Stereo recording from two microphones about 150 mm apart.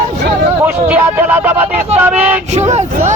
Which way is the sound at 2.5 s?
50° right (ahead or behind).